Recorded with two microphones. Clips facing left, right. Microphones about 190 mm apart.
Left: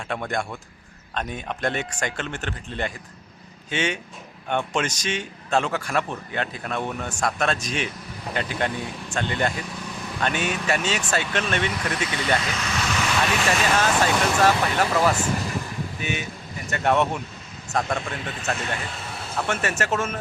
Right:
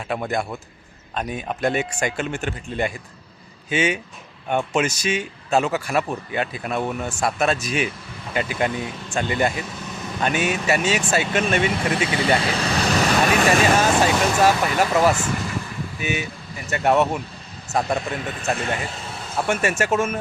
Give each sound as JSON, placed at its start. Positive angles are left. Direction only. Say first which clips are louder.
{"t": 0.1, "sound": "a man's voice", "louder": "right 3 dB", "side_deg": -5}
{"t": 11.7, "sound": "speech", "louder": "right 5 dB", "side_deg": -25}
{"t": 12.4, "sound": "vehicle", "louder": "right 6 dB", "side_deg": -35}
{"t": 13.7, "sound": "a man's voice", "louder": "right 3 dB", "side_deg": -10}
{"t": 19.5, "sound": "speech", "louder": "right 5 dB", "side_deg": -10}